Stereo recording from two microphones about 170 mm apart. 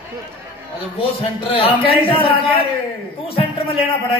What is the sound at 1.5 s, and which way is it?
A man's voice, 30° left (ahead or behind).